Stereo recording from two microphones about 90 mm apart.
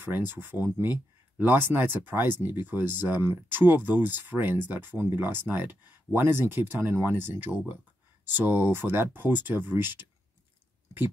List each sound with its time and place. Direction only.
0.0 s speech: 25° right (ahead or behind)